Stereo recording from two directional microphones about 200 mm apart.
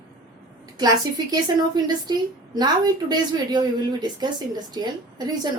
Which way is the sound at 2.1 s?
20° right (ahead or behind).